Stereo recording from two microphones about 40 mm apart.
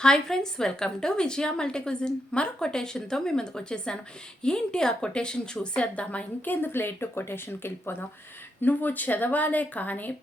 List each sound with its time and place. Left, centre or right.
0.0 s a woman's voice: centre; by 6.2 s left
6.4 s speech: left
8.6 s speech: left